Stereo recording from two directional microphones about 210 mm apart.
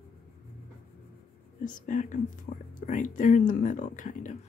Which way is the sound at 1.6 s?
40° left (ahead or behind).